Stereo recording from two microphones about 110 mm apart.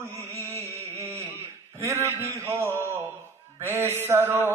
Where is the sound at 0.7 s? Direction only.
25° right (ahead or behind).